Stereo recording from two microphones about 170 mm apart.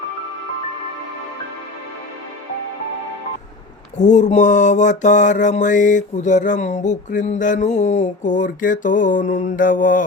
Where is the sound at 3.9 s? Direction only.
45° left (ahead or behind).